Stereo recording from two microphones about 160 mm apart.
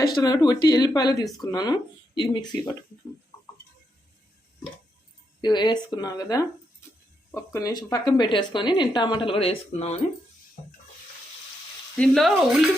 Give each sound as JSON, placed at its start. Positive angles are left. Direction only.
{"t": 0.2, "sound": "speech", "side_deg": 25}
{"t": 5.4, "sound": "speech", "side_deg": 25}
{"t": 11.9, "sound": "speech", "side_deg": 5}